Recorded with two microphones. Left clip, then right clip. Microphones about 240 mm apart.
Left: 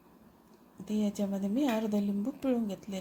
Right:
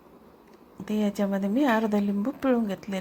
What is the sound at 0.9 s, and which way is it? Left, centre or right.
A woman's voice, centre.